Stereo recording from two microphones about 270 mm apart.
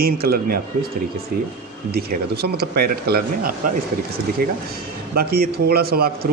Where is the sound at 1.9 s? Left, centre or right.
Right.